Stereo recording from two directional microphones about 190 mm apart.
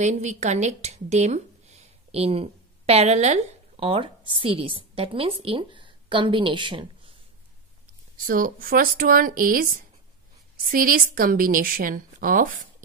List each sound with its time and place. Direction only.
0.0 s a woman's voice: 40° right (ahead or behind)
8.3 s a woman's voice: 50° right (ahead or behind)
10.7 s a woman's voice: 50° right (ahead or behind)